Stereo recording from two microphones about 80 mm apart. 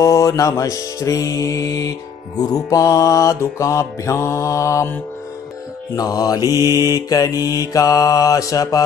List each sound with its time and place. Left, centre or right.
0.0 s music: left
5.9 s mantra: left
6.4 s mantra: right
6.8 s mantra: left